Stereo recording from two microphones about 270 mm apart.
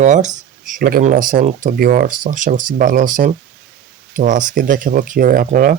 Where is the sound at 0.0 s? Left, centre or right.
Right.